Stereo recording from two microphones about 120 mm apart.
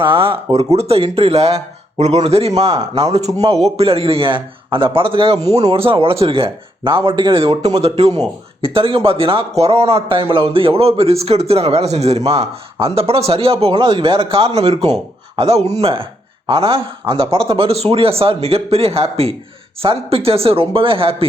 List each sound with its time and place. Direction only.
0.0 s a man's voice: 45° right (ahead or behind)
0.5 s a man's voice: 60° right (ahead or behind)